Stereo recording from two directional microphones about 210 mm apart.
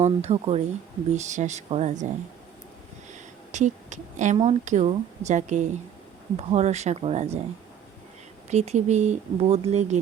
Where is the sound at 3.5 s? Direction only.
35° right (ahead or behind).